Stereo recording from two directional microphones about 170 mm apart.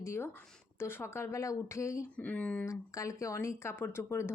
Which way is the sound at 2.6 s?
20° left (ahead or behind).